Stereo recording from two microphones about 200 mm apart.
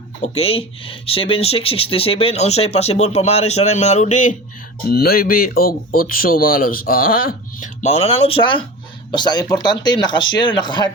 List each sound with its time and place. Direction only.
0.2 s speech: 30° left (ahead or behind)
4.9 s speech: 50° left (ahead or behind); by 10.9 s 20° left (ahead or behind)